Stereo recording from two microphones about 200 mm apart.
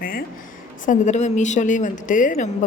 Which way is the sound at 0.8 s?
40° left (ahead or behind).